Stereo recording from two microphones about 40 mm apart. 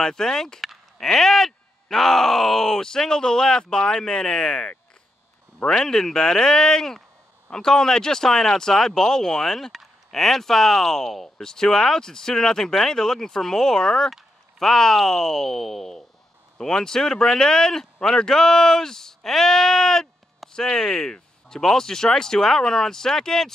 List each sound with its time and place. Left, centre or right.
0.0 s speech: centre
0.6 s a sound: centre
1.0 s speech: centre
5.8 s speech: centre